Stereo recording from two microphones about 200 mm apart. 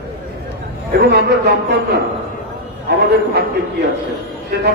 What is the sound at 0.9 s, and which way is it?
A man's voice, 55° right (ahead or behind).